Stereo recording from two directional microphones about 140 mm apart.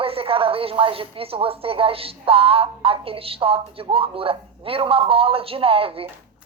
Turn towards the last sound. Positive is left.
turn(degrees=-40)  # may be behind; listen again after turning